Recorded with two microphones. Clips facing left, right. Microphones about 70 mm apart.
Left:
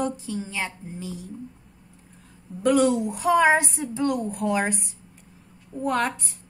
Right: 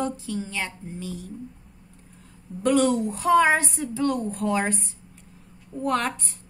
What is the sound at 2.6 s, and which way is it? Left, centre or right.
A woman's voice, centre.